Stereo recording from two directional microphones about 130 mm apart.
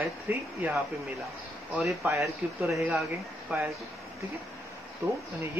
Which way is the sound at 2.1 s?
Centre (ahead or behind).